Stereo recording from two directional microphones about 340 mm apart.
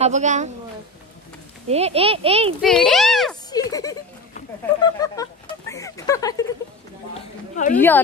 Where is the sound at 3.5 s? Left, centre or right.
Centre.